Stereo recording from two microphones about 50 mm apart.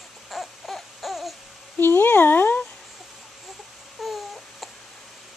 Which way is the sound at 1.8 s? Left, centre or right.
Left.